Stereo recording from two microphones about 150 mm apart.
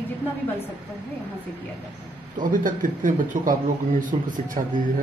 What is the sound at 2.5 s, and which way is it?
A man's voice, 65° right (ahead or behind).